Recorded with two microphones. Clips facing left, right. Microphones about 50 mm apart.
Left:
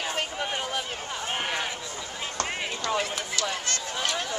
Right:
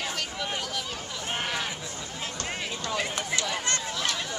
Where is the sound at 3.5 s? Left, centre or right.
Right.